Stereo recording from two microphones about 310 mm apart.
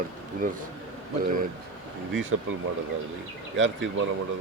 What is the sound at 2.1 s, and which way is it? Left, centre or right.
Speech, right.